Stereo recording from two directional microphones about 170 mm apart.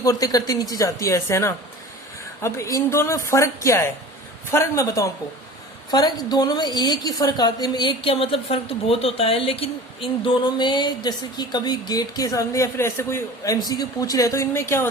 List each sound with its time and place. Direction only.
0.0 s a woman's voice: 20° left (ahead or behind)